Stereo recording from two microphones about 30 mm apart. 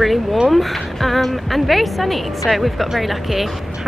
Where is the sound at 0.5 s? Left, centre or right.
Centre.